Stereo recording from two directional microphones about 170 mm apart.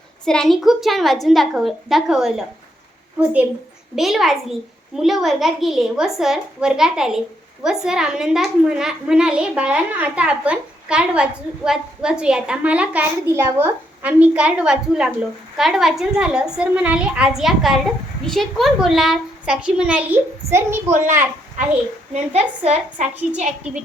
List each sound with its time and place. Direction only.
0.3 s a child's voice: 5° left (ahead or behind)
3.9 s a child's voice: centre (ahead or behind)
22.1 s a woman's voice: 40° right (ahead or behind)